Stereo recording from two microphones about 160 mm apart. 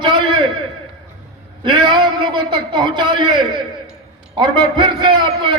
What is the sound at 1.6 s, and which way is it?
A man's voice, 30° right (ahead or behind).